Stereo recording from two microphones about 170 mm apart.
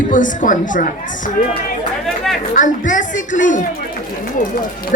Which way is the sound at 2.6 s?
50° left (ahead or behind).